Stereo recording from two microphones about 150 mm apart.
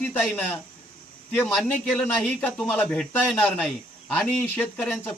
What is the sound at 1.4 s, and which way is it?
A man's voice, centre (ahead or behind).